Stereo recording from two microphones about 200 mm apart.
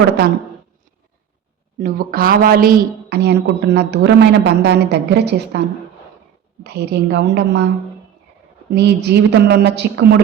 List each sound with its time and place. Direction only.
1.8 s speech: 45° right (ahead or behind)
6.7 s speech: 55° right (ahead or behind)
8.7 s speech: 55° right (ahead or behind)